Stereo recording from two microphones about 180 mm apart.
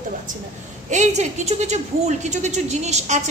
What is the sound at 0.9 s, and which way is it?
A woman's voice, 40° right (ahead or behind).